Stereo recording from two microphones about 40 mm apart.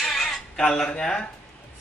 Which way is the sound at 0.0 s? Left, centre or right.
Centre.